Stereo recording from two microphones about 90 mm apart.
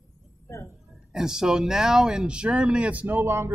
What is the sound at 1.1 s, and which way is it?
Speech, 5° right (ahead or behind).